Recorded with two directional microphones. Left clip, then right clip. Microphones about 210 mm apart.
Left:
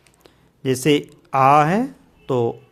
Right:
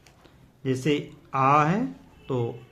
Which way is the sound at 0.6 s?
55° left (ahead or behind).